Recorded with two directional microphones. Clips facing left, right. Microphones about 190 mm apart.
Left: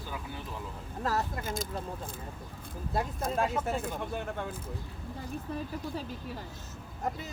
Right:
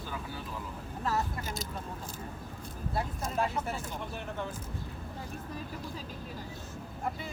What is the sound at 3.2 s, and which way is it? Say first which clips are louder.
Speech: left 3 dB; 50° left (ahead or behind).